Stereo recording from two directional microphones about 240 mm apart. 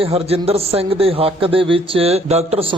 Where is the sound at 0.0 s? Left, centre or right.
Right.